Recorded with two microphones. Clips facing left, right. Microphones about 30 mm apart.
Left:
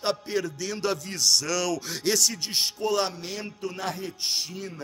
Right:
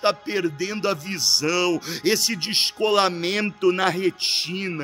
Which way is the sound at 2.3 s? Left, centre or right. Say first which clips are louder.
Right 5 dB; right.